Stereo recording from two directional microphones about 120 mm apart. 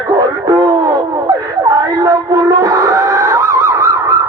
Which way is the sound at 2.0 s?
30° right (ahead or behind).